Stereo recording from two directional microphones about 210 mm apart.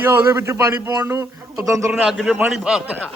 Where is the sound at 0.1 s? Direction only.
15° right (ahead or behind).